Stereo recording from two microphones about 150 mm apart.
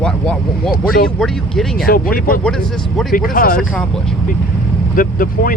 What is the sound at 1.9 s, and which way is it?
Speech, 70° left (ahead or behind).